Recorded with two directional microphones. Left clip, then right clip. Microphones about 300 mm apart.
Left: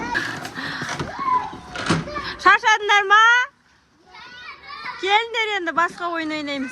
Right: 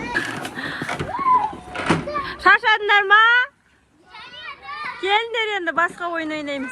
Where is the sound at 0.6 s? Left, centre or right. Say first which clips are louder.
Left 1 dB; centre.